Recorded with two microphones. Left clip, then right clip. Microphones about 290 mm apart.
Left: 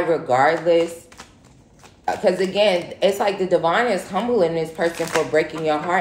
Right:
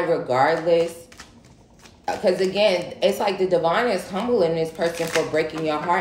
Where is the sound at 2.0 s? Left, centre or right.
Left.